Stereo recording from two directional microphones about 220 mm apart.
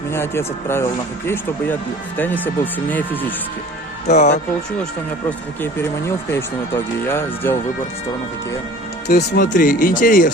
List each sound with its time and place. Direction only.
0.1 s speech: 10° left (ahead or behind)
2.1 s speech: 10° left (ahead or behind)
4.1 s speech: 30° left (ahead or behind)
5.7 s speech: 10° left (ahead or behind)
9.0 s speech: 45° left (ahead or behind)